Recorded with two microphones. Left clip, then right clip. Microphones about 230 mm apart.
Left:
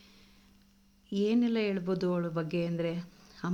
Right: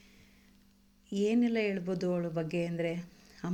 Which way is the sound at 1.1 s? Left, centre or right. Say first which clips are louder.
Even; centre.